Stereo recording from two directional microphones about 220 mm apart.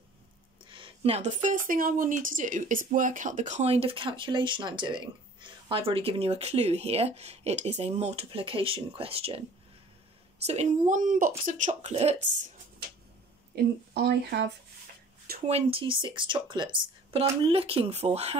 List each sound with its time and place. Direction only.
0.7 s speech: 25° right (ahead or behind)
10.4 s speech: 30° right (ahead or behind)
13.5 s speech: 45° right (ahead or behind)
15.5 s speech: 25° right (ahead or behind)